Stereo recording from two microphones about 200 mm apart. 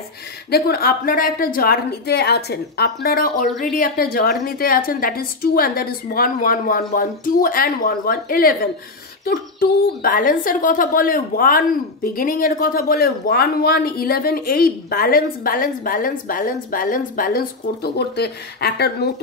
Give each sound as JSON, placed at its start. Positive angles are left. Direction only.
{"t": 0.5, "sound": "a woman's voice", "side_deg": 50}